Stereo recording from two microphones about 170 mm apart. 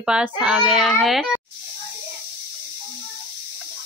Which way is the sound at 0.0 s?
5° right (ahead or behind).